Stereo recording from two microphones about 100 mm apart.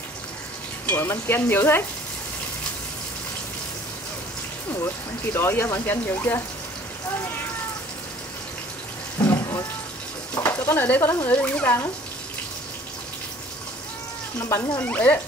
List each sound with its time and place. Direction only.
0.8 s speech: 25° left (ahead or behind)
4.7 s speech: 25° left (ahead or behind)
10.3 s speech: 20° left (ahead or behind)
14.4 s speech: 30° left (ahead or behind)
14.8 s speech: 15° left (ahead or behind)